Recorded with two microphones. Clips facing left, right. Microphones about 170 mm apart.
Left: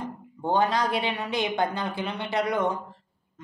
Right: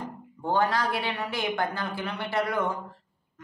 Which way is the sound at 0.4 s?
20° left (ahead or behind).